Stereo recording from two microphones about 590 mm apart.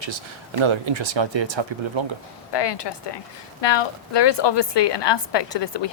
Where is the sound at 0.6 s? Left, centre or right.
Right.